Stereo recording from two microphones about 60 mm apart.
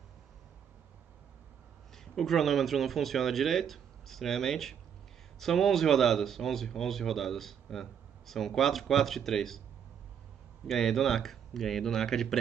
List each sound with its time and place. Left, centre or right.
2.1 s speech: centre
10.7 s speech: centre